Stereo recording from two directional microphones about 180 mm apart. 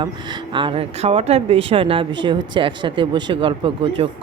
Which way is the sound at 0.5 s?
30° right (ahead or behind).